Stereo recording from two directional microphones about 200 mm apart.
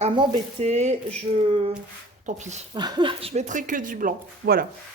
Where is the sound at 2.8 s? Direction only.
20° right (ahead or behind); by 4.6 s 45° right (ahead or behind).